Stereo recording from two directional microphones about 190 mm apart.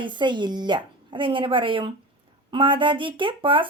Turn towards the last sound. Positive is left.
turn(degrees=-25)  # may be behind; listen again after turning